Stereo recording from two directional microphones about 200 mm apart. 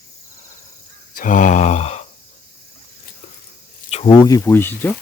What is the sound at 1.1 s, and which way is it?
Mantra, 40° left (ahead or behind).